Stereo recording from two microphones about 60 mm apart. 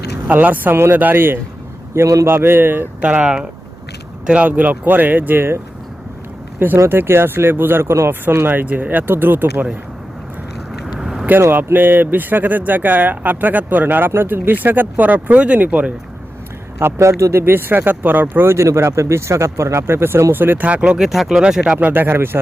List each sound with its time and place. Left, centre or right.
0.3 s speech: right
3.0 s speech: centre; by 5.5 s right
6.7 s speech: right
10.8 s vehicle: centre
11.3 s speech: right
16.7 s speech: right
17.4 s speech: right
18.4 s speech: right
20.7 s speech: right
21.0 s speech: centre
21.4 s speech: centre
22.1 s speech: right